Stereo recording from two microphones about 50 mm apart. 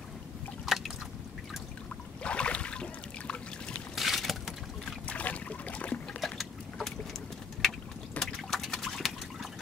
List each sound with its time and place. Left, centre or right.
0.7 s drip: centre
2.2 s boat: left
3.9 s boat: centre
5.0 s boat: left
6.2 s boat: centre
8.2 s liquid: centre